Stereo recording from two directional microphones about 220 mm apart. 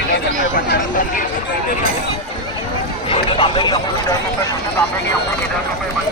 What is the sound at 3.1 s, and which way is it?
Speech, 20° left (ahead or behind).